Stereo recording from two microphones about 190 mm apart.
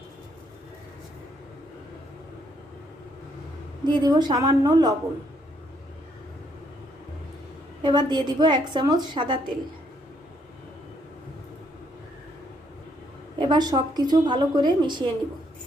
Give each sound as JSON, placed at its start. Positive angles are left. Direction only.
{"t": 3.8, "sound": "a woman's voice", "side_deg": -25}
{"t": 7.8, "sound": "a woman's voice", "side_deg": -25}
{"t": 13.4, "sound": "a woman's voice", "side_deg": -20}